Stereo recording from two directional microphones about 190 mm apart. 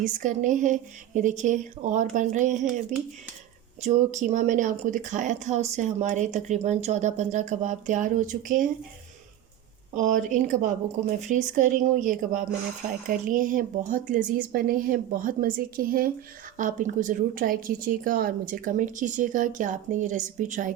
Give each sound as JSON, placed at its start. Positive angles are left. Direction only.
{"t": 0.0, "sound": "speech", "side_deg": -40}
{"t": 9.9, "sound": "a woman's voice", "side_deg": -40}